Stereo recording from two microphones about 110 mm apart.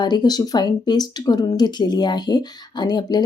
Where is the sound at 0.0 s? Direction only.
40° left (ahead or behind).